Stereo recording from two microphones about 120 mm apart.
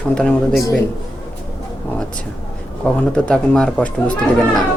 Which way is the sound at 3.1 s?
5° left (ahead or behind).